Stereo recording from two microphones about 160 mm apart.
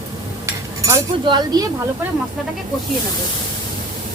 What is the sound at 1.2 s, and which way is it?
Speech, 30° right (ahead or behind).